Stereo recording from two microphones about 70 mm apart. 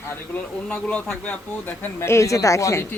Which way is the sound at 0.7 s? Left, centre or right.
Centre.